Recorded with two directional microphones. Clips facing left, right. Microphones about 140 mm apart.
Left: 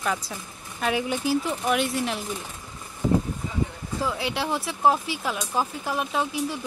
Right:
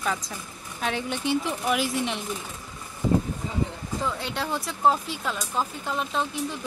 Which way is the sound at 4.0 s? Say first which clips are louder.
Left 3 dB; 5° left (ahead or behind).